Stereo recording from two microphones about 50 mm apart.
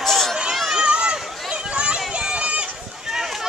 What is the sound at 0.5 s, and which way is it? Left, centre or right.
Run, centre.